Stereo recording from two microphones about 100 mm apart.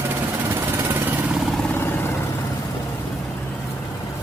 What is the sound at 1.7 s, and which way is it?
Vehicle, 25° left (ahead or behind).